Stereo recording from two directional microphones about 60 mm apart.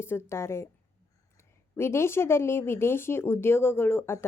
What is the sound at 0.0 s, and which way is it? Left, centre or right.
Speech, left.